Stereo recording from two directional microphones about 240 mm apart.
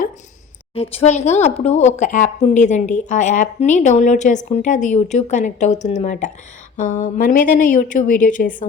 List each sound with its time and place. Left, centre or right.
0.7 s a woman's voice: left